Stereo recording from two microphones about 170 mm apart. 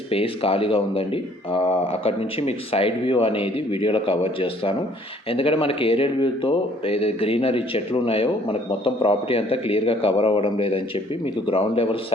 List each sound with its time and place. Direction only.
0.1 s speech: 35° left (ahead or behind)